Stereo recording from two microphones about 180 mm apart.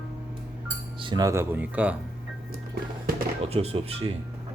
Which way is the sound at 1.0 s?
25° right (ahead or behind).